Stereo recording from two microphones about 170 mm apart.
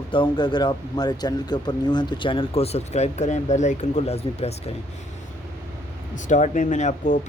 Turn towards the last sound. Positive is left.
turn(degrees=45)  # may be behind; listen again after turning